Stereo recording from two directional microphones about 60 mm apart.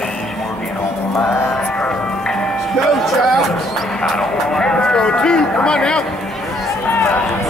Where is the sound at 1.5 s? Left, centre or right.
Centre.